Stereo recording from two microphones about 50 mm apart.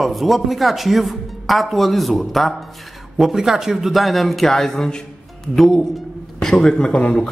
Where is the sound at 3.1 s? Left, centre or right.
Centre; by 7.3 s left.